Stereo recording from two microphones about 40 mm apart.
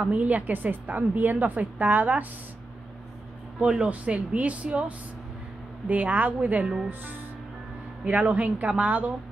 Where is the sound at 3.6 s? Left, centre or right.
Right.